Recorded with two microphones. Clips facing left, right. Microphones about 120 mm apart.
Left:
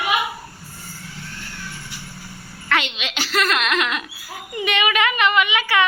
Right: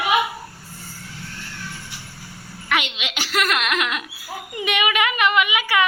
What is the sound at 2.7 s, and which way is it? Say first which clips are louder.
Speech: left 1 dB; 15° right (ahead or behind).